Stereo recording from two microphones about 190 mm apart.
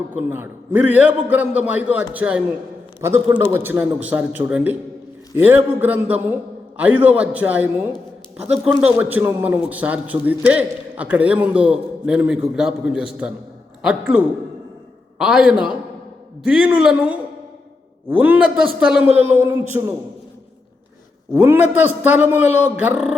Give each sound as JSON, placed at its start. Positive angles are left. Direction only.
{"t": 0.2, "sound": "a man's voice", "side_deg": -10}
{"t": 21.3, "sound": "a man's voice", "side_deg": -10}